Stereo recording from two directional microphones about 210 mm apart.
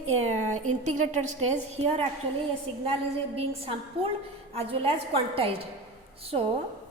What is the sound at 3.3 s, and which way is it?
A woman's voice, 25° right (ahead or behind).